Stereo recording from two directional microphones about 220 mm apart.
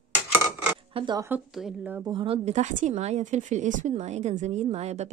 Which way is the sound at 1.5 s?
Centre (ahead or behind).